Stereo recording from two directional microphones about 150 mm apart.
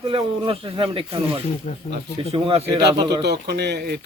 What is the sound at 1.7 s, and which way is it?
Speech, 45° left (ahead or behind).